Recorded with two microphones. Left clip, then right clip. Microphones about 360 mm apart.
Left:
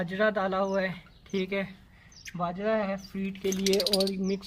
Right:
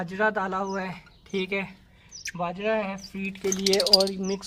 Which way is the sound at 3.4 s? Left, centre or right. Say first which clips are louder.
Right 3 dB; right.